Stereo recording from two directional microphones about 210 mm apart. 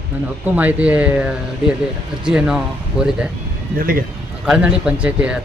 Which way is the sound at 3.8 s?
45° right (ahead or behind).